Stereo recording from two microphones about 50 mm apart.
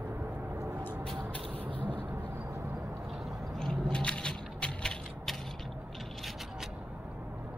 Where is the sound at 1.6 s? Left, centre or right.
Right.